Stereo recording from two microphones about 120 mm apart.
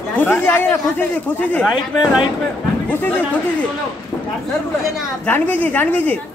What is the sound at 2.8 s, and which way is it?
Speech, 20° left (ahead or behind).